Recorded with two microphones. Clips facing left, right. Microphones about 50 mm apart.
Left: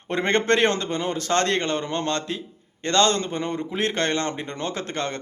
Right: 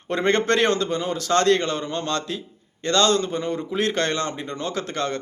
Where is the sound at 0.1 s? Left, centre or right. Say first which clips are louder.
Right 1 dB; left.